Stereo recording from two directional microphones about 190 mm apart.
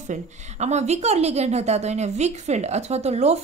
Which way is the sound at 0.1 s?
35° right (ahead or behind).